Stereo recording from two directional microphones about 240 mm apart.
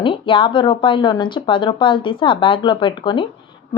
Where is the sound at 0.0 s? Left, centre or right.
Left.